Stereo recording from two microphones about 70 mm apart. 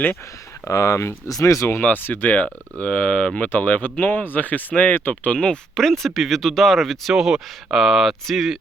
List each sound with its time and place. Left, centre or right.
0.7 s speech: left
1.8 s speech: left; by 8.5 s centre